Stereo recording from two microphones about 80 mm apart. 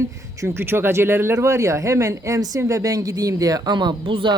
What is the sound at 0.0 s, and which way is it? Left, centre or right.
Speech, right.